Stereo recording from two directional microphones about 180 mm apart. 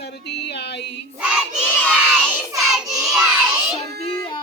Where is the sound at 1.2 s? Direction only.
5° right (ahead or behind).